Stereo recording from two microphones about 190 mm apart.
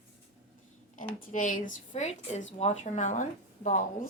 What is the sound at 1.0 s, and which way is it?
A woman's voice, 45° left (ahead or behind).